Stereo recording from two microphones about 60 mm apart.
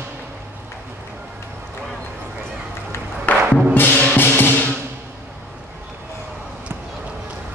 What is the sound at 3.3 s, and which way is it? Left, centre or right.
Music, left.